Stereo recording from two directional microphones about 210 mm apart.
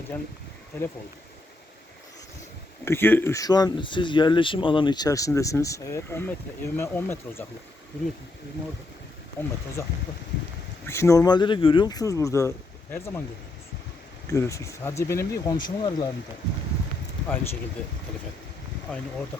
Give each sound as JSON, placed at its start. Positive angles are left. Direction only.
{"t": 0.1, "sound": "speech", "side_deg": 10}
{"t": 2.8, "sound": "speech", "side_deg": 10}
{"t": 9.4, "sound": "speech", "side_deg": 10}
{"t": 10.8, "sound": "speech", "side_deg": 10}
{"t": 14.3, "sound": "speech", "side_deg": 15}
{"t": 17.2, "sound": "speech", "side_deg": 10}